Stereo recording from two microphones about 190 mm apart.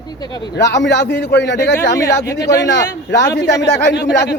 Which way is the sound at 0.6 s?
65° left (ahead or behind).